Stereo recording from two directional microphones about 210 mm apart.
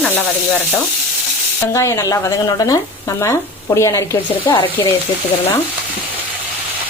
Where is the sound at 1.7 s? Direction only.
15° left (ahead or behind).